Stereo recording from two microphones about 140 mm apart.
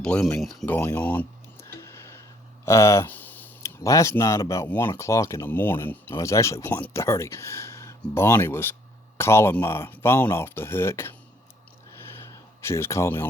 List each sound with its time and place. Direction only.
0.0 s speech: 5° left (ahead or behind)
0.6 s a sound: 10° left (ahead or behind)
2.6 s speech: 20° left (ahead or behind)
12.6 s speech: 20° left (ahead or behind)